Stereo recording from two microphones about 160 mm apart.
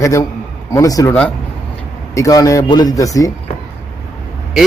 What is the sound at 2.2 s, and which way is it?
A man's voice, 20° left (ahead or behind).